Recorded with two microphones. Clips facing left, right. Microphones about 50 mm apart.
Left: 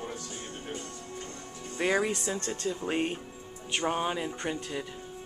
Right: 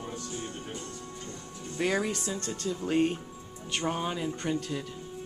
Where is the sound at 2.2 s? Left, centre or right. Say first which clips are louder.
Left 1 dB; left.